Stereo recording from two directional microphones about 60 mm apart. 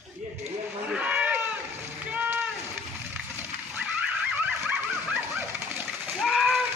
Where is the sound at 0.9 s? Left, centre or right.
Right.